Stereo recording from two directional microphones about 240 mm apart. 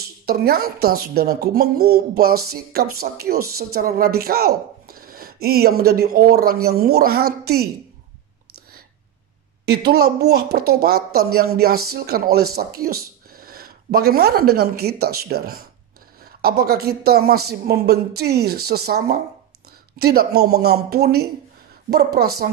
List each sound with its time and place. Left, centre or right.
0.3 s speech: right
9.7 s speech: right